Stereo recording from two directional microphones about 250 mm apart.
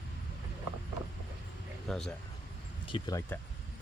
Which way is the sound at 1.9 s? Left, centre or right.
Centre.